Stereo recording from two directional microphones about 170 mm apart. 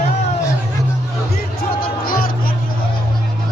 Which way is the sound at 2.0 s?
60° left (ahead or behind).